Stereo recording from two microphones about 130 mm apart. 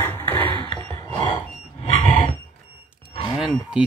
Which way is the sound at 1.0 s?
30° left (ahead or behind).